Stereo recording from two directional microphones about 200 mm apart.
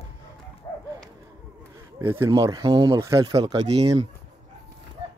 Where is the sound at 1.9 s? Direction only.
10° right (ahead or behind).